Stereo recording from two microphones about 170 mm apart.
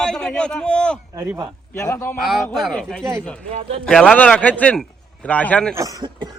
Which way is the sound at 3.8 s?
5° left (ahead or behind).